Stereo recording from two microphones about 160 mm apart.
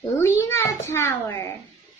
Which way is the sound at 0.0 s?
20° left (ahead or behind).